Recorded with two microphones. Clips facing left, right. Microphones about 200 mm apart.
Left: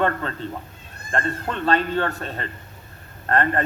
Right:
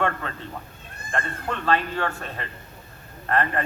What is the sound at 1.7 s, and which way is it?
A man's voice, 40° left (ahead or behind).